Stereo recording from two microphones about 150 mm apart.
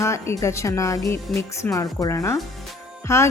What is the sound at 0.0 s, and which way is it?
Speech, 20° left (ahead or behind).